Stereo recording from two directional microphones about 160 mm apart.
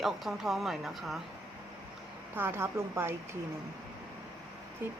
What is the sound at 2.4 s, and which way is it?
Speech, 15° right (ahead or behind).